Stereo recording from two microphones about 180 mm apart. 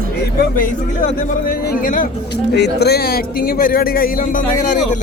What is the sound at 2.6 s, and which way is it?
A man's voice, 65° left (ahead or behind).